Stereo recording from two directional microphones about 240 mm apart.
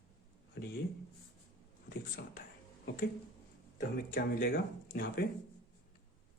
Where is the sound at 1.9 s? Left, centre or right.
Left.